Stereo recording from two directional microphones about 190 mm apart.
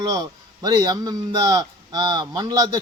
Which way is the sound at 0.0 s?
20° right (ahead or behind).